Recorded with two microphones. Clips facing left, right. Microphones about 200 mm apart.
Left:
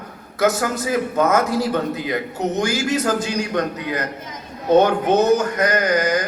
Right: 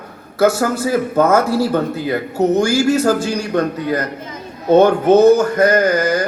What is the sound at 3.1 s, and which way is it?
Speech, 30° right (ahead or behind).